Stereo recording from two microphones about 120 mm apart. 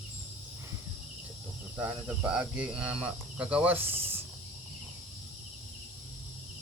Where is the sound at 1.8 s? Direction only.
10° right (ahead or behind).